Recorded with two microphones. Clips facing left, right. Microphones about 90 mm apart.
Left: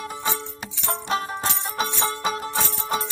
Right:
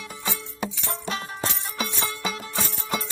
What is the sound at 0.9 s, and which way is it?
Music, 35° left (ahead or behind).